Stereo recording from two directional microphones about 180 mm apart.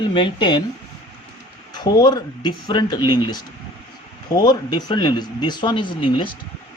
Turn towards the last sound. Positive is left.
turn(degrees=25)  # may be behind; listen again after turning